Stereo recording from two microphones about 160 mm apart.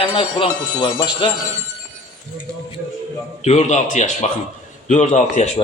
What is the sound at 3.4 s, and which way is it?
Speech, 45° left (ahead or behind).